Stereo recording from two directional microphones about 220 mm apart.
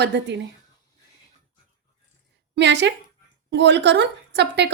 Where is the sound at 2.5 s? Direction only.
55° right (ahead or behind).